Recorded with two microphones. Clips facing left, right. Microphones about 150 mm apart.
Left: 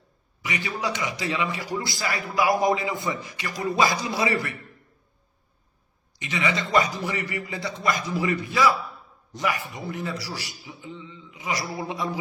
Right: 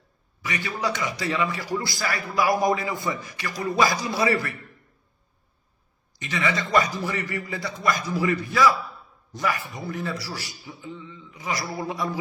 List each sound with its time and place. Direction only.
0.4 s a man's voice: 20° left (ahead or behind)
6.1 s a man's voice: 20° left (ahead or behind)